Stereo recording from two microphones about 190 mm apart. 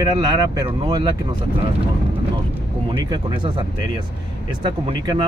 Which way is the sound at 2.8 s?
25° right (ahead or behind).